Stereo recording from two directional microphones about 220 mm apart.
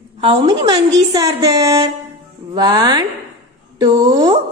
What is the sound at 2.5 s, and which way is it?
Child singing, 20° right (ahead or behind).